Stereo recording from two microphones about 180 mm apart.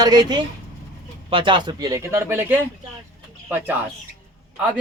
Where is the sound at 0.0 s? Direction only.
20° right (ahead or behind).